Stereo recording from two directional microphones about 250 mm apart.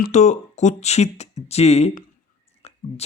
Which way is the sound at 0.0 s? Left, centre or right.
Left.